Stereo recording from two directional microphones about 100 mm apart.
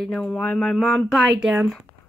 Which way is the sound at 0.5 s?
5° left (ahead or behind).